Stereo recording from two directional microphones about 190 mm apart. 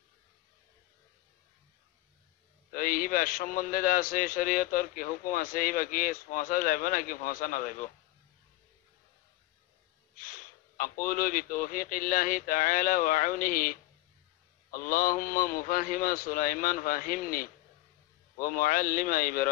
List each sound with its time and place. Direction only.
2.7 s a man's voice: 45° left (ahead or behind)
10.2 s a man's voice: 45° left (ahead or behind)